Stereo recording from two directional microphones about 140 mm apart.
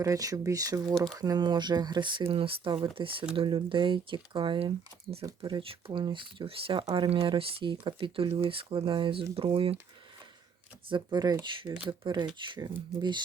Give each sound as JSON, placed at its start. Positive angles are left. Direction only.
{"t": 0.0, "sound": "speech", "side_deg": -25}
{"t": 10.8, "sound": "speech", "side_deg": -35}